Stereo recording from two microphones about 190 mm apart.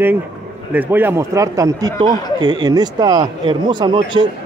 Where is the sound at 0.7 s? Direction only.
10° right (ahead or behind).